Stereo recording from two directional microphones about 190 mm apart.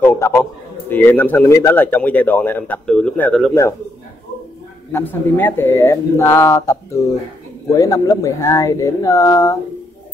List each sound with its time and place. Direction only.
0.0 s a man's voice: 10° left (ahead or behind)
4.9 s a man's voice: 10° left (ahead or behind)